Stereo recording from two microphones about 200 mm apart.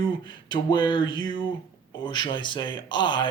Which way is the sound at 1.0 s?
75° left (ahead or behind).